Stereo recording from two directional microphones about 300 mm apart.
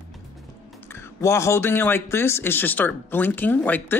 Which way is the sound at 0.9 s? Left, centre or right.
Centre.